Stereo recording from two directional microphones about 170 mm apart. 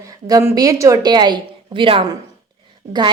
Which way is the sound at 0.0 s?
20° right (ahead or behind).